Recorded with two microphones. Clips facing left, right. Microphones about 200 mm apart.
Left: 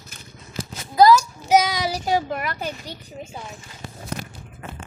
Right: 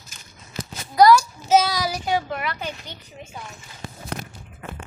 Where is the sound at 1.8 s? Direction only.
35° left (ahead or behind).